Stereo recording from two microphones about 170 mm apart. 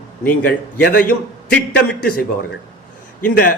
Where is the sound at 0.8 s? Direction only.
60° left (ahead or behind).